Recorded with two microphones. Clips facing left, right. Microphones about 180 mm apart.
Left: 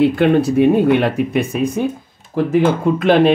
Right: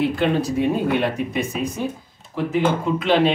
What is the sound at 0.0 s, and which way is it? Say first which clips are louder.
Speech: left 7 dB; 55° left (ahead or behind).